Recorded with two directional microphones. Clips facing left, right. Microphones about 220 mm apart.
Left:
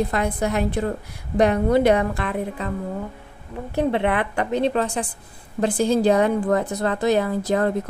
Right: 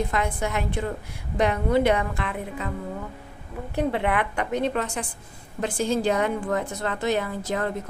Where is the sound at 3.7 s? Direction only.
30° left (ahead or behind).